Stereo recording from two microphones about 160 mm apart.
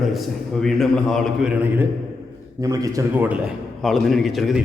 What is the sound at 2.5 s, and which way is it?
Speech, 20° right (ahead or behind).